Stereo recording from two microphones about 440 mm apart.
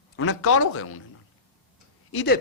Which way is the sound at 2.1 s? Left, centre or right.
Left.